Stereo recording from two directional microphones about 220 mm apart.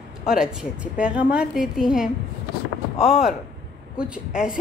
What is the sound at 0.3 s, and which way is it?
A woman's voice, 5° right (ahead or behind).